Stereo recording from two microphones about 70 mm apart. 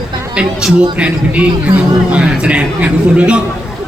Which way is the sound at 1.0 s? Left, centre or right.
Centre.